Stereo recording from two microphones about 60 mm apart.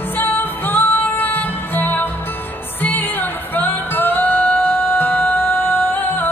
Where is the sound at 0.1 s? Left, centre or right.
Left.